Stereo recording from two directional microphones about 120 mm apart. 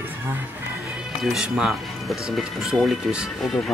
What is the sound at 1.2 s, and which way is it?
Speech, 5° right (ahead or behind).